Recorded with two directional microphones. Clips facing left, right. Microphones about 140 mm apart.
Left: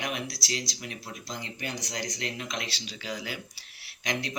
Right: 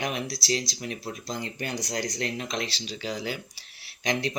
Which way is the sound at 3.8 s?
30° right (ahead or behind).